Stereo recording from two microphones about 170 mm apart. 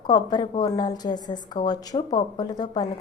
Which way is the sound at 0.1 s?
25° left (ahead or behind).